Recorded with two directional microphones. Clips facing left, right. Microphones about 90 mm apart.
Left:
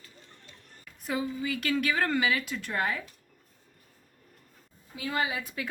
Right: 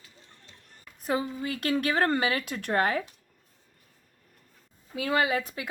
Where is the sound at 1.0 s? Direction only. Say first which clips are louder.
Right 2 dB; 45° right (ahead or behind).